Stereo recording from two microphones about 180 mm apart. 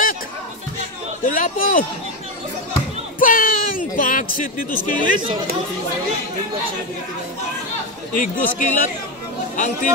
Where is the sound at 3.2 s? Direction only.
50° left (ahead or behind).